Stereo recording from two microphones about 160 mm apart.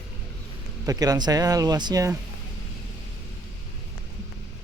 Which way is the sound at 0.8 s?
20° right (ahead or behind).